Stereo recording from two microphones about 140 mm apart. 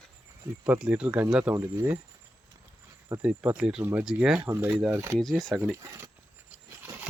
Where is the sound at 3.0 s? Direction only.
10° right (ahead or behind).